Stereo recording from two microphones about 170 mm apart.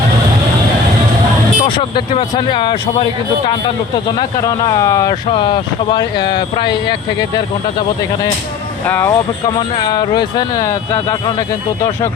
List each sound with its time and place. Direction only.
1.6 s speech: 30° left (ahead or behind)
8.9 s speech: 15° left (ahead or behind)
9.6 s speech: 25° left (ahead or behind)